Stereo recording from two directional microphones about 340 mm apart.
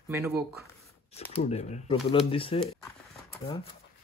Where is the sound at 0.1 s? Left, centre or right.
Centre.